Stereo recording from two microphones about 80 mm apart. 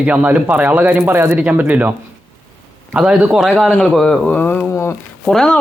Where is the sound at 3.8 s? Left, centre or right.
Centre.